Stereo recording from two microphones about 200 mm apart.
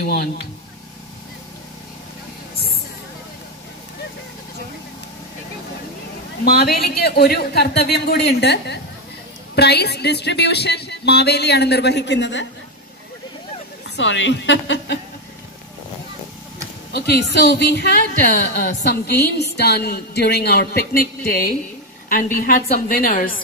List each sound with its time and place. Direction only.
0.0 s a woman's voice: 50° left (ahead or behind)
6.4 s a woman's voice: 50° left (ahead or behind)
13.8 s speech: 65° left (ahead or behind)
16.9 s a woman's voice: 55° left (ahead or behind)